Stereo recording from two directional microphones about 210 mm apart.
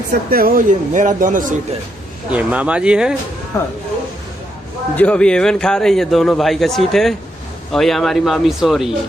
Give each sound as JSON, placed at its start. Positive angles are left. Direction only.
{"t": 0.1, "sound": "speech", "side_deg": -45}
{"t": 2.3, "sound": "a man's voice", "side_deg": -5}
{"t": 3.5, "sound": "speech", "side_deg": 15}
{"t": 4.9, "sound": "a man's voice", "side_deg": 5}